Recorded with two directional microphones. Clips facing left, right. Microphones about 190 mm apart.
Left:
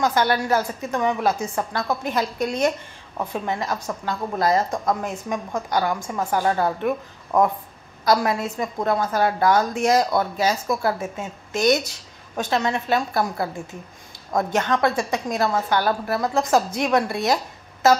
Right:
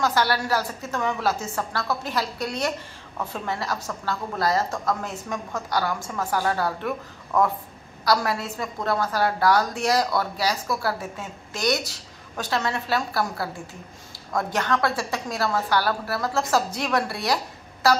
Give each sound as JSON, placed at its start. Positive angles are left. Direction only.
{"t": 0.0, "sound": "a woman's voice", "side_deg": 20}